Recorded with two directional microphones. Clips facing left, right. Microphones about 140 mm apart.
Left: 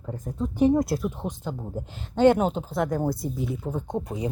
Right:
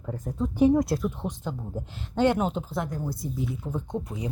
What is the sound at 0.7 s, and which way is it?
Speech, 5° left (ahead or behind).